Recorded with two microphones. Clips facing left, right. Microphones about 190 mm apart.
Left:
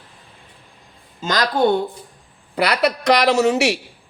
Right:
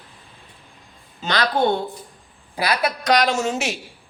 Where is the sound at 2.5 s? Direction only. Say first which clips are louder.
Left 4 dB; 65° left (ahead or behind).